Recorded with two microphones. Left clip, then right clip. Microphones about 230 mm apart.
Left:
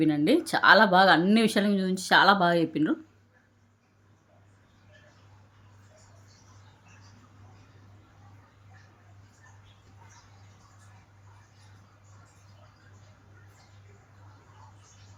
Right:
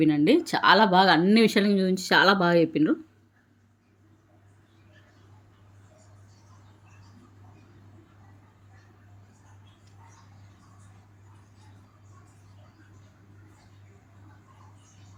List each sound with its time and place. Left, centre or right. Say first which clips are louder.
0.0 s speech: right 3 dB; centre